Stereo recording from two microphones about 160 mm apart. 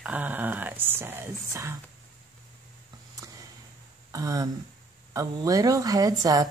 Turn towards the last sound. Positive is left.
turn(degrees=-20)  # may be behind; listen again after turning